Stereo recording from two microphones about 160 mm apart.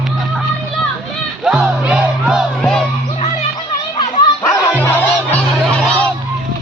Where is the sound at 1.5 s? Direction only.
5° right (ahead or behind).